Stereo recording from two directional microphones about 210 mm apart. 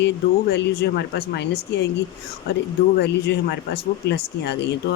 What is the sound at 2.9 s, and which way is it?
Speech, 50° left (ahead or behind).